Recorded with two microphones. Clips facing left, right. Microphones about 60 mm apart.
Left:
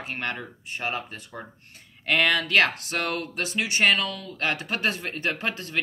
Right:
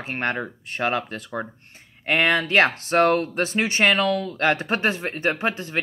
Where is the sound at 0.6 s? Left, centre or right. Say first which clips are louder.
Right 6 dB; right.